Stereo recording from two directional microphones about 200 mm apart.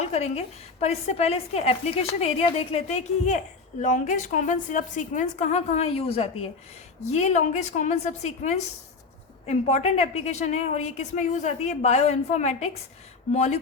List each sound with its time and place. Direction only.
0.0 s a woman's voice: 30° left (ahead or behind)